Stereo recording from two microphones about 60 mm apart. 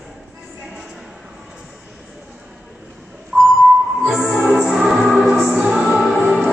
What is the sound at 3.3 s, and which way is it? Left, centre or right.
Beep, right.